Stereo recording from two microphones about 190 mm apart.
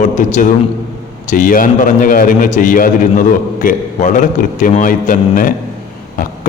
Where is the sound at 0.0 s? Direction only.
40° left (ahead or behind).